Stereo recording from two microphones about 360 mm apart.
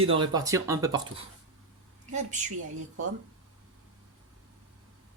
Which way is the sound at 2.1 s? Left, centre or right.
Centre.